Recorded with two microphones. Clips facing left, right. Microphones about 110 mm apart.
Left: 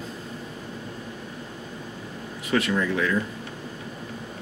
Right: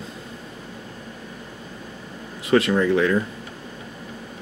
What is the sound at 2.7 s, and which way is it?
Speech, 40° right (ahead or behind).